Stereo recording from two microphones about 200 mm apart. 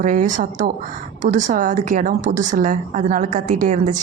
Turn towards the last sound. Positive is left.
turn(degrees=-40)  # may be behind; listen again after turning